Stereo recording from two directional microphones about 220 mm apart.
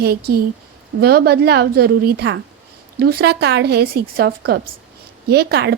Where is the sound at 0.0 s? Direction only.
45° right (ahead or behind).